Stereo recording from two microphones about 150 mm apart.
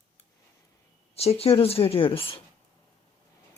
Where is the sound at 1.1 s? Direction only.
45° left (ahead or behind).